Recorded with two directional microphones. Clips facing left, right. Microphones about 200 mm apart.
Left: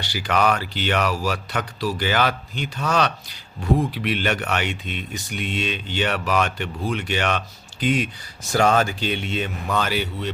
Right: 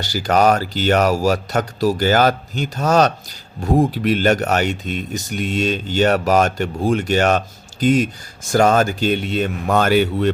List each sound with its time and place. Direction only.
0.0 s speech: 40° right (ahead or behind)